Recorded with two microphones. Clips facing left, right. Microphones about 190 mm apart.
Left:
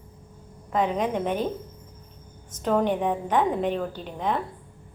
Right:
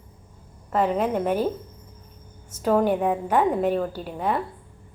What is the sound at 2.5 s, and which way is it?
A woman's voice, 5° right (ahead or behind).